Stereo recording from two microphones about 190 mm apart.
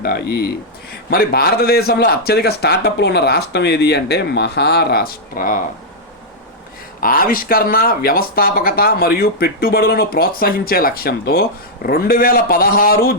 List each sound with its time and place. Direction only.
0.0 s a man's voice: 55° left (ahead or behind)
7.0 s speech: 50° left (ahead or behind)